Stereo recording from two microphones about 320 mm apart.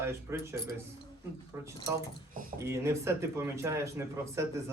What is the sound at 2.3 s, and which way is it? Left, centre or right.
Speech, right.